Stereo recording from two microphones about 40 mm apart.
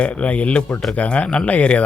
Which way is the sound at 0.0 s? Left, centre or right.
Left.